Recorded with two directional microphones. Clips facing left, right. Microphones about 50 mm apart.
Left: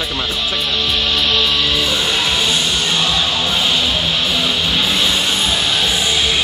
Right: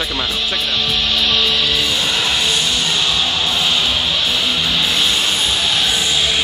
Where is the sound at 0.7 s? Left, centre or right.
Centre.